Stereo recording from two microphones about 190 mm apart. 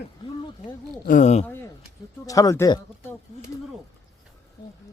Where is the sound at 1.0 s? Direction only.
40° left (ahead or behind).